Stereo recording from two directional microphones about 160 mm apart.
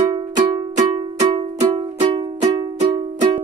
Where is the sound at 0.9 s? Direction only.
30° right (ahead or behind).